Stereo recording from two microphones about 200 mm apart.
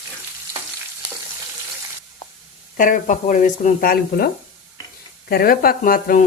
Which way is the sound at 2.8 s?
40° left (ahead or behind).